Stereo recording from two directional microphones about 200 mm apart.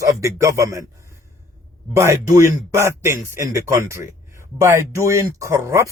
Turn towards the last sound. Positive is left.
turn(degrees=-15)  # may be behind; listen again after turning